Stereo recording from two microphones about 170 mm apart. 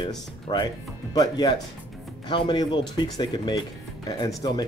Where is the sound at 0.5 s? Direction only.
25° left (ahead or behind).